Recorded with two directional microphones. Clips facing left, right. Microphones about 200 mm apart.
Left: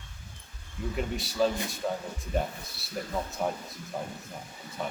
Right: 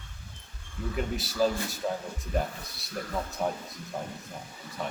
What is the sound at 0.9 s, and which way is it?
Speech, centre (ahead or behind).